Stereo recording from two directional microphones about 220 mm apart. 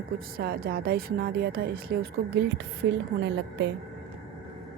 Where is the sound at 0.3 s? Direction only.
45° right (ahead or behind).